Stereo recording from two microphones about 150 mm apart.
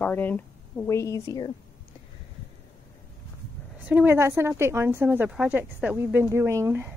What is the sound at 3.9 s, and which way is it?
Speech, 10° right (ahead or behind).